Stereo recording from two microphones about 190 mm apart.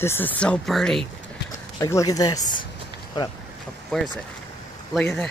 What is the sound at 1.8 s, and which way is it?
Speech, 15° left (ahead or behind).